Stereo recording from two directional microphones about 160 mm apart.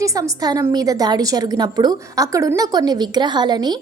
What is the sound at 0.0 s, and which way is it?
A woman's voice, 20° right (ahead or behind).